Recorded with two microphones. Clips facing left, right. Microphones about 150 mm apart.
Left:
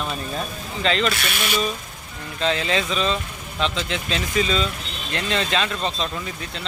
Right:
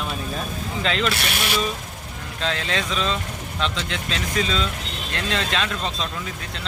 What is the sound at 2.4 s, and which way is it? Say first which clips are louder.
Speech: left 4 dB; centre (ahead or behind).